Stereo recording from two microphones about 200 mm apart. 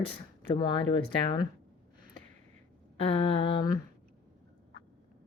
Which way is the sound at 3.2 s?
25° left (ahead or behind).